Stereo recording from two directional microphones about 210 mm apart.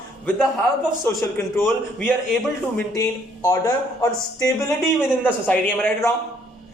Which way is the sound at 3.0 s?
15° left (ahead or behind).